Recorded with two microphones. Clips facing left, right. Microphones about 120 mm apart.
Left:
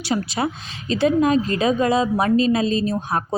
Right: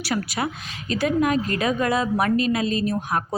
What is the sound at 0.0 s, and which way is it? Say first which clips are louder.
A woman's voice: left 3 dB; 25° left (ahead or behind).